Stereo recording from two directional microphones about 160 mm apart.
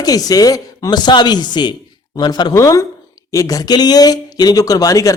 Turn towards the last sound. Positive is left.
turn(degrees=20)  # may be behind; listen again after turning